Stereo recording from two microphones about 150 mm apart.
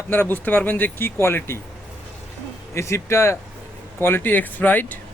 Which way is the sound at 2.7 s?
20° left (ahead or behind).